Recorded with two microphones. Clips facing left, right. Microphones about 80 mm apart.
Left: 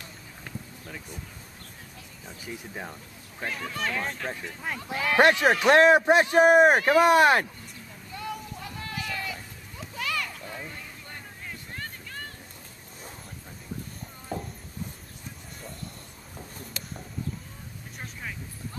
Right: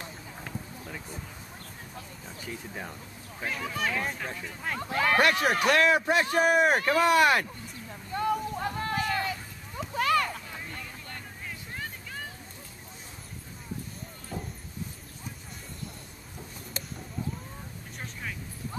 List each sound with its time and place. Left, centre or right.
0.4 s a sound: centre
2.4 s speech: centre
5.1 s speech: left
8.1 s a sound: right
11.4 s vehicle: centre
16.8 s livestock: right